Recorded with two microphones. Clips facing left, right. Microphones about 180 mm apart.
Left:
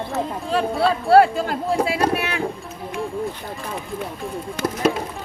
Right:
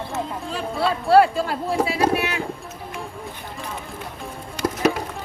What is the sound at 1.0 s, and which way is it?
Speech, 55° left (ahead or behind).